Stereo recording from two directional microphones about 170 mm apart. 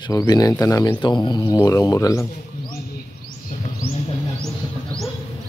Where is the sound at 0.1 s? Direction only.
20° left (ahead or behind).